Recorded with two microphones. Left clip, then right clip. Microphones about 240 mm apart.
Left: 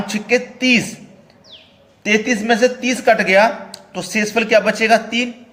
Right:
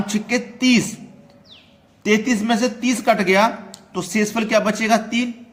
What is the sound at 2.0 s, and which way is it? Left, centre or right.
A man's voice, right.